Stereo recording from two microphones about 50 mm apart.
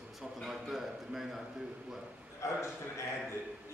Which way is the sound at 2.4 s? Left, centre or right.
Left.